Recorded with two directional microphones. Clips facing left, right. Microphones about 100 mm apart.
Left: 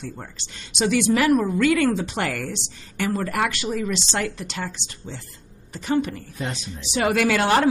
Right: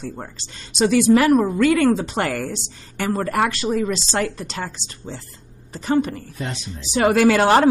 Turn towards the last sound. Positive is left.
turn(degrees=-35)  # may be behind; listen again after turning